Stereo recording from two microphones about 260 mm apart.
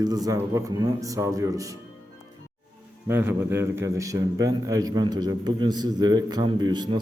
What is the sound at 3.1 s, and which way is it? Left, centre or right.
A man's voice, centre.